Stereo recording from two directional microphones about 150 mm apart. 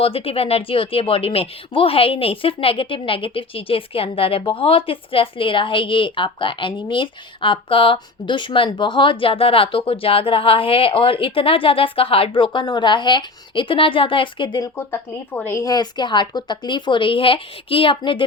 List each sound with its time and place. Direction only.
0.0 s speech: 40° left (ahead or behind)
14.8 s speech: 15° left (ahead or behind); by 18.2 s 35° left (ahead or behind)